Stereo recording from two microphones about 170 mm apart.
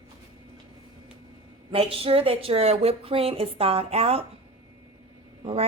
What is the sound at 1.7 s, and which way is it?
Speech, 35° right (ahead or behind).